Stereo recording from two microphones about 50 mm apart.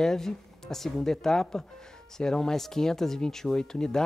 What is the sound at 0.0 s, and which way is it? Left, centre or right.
Speech, centre.